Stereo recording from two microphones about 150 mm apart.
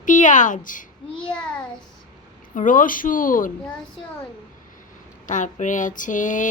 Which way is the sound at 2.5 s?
60° left (ahead or behind).